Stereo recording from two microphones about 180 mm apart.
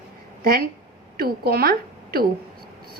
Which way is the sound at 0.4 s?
55° right (ahead or behind).